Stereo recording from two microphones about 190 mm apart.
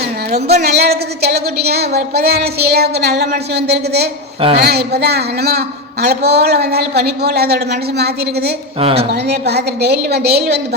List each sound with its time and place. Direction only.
0.4 s a man's voice: 60° right (ahead or behind)
8.8 s speech: 30° right (ahead or behind)
9.1 s a man's voice: 60° right (ahead or behind)